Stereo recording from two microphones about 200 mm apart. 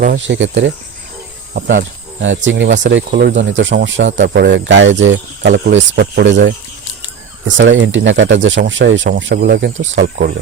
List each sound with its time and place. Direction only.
0.0 s speech: 55° right (ahead or behind)
2.2 s speech: 65° right (ahead or behind)
2.9 s speech: 55° right (ahead or behind)
3.5 s speech: 70° right (ahead or behind)
9.7 s speech: 35° right (ahead or behind)
10.0 s speech: 55° right (ahead or behind)